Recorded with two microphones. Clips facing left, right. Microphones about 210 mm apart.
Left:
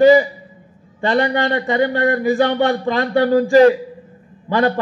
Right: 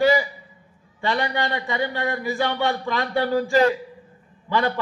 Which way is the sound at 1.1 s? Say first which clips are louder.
Left 7 dB; 50° left (ahead or behind).